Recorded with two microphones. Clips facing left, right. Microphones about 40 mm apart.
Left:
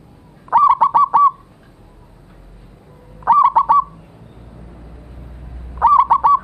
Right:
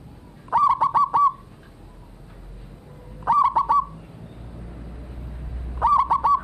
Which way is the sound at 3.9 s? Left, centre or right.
Centre.